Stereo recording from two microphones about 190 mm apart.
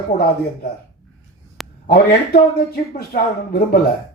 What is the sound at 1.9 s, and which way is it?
Speech, 50° left (ahead or behind).